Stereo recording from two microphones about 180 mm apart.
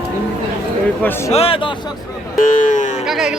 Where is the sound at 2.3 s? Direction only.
45° left (ahead or behind).